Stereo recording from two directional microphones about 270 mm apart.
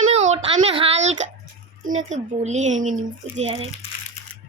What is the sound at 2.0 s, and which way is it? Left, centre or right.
Speech, right.